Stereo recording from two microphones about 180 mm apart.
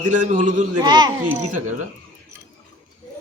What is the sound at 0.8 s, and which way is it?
Speech, 25° right (ahead or behind).